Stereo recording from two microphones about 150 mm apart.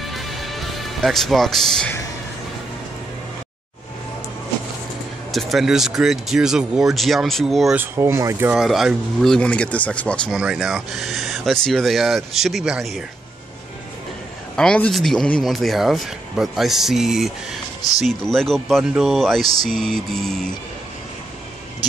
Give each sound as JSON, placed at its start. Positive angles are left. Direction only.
{"t": 0.0, "sound": "music", "side_deg": 0}
{"t": 5.3, "sound": "speech", "side_deg": 0}
{"t": 7.8, "sound": "speech", "side_deg": -15}
{"t": 8.5, "sound": "speech", "side_deg": -5}
{"t": 10.3, "sound": "speech", "side_deg": -5}
{"t": 14.5, "sound": "speech", "side_deg": 5}